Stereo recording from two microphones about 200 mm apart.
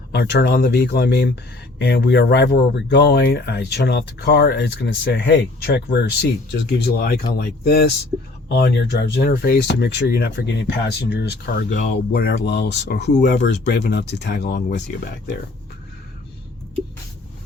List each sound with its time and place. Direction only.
0.1 s speech: 55° left (ahead or behind)